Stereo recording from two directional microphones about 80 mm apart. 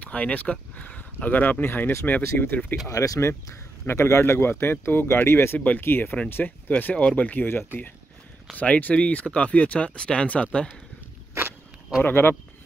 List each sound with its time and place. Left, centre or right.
0.0 s speech: centre
2.9 s speech: left
8.5 s speech: centre
12.0 s speech: left